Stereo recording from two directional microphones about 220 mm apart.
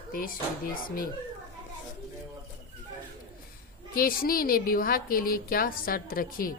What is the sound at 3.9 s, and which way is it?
A woman's voice, 40° left (ahead or behind).